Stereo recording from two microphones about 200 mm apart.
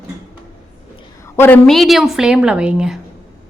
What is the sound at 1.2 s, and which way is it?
A woman's voice, 10° left (ahead or behind).